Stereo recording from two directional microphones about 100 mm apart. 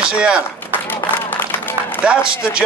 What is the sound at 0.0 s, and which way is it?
Speech, 10° right (ahead or behind).